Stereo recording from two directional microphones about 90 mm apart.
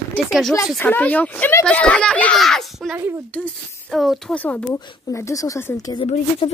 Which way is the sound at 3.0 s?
30° right (ahead or behind).